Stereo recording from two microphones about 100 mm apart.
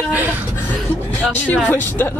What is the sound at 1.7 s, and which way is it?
Speech, 20° left (ahead or behind).